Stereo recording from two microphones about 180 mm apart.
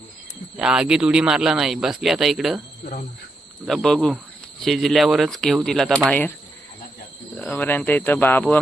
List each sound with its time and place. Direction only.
0.5 s speech: 5° right (ahead or behind)
3.7 s speech: centre (ahead or behind)
7.3 s speech: 5° left (ahead or behind)